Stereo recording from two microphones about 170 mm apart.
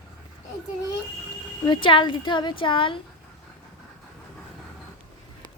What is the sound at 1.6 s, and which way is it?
Speech, 30° left (ahead or behind).